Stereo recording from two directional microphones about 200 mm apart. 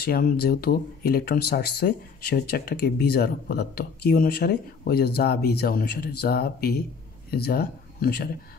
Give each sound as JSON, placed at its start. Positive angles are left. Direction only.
{"t": 0.0, "sound": "speech", "side_deg": 50}